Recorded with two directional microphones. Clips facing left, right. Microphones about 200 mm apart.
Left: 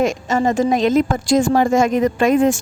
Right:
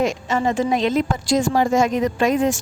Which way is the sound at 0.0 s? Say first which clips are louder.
Left 3 dB; 45° left (ahead or behind).